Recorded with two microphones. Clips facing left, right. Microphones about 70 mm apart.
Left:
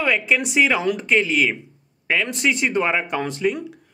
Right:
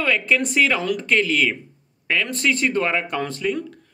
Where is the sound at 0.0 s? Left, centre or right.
Centre.